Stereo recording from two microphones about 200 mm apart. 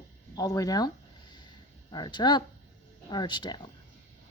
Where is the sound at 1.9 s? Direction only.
20° left (ahead or behind).